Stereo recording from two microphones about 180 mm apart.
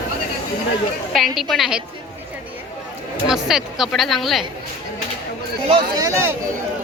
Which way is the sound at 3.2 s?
Centre (ahead or behind).